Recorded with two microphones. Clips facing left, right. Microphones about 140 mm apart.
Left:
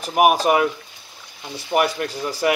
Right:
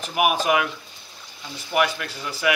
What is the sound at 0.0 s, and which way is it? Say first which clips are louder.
Speech: left 5 dB; 40° left (ahead or behind).